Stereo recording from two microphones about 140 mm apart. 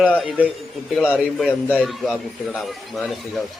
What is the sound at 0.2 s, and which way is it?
A man's voice, 5° right (ahead or behind).